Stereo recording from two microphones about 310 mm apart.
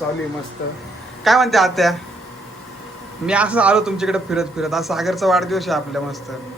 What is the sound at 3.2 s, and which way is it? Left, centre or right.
A man's voice, centre.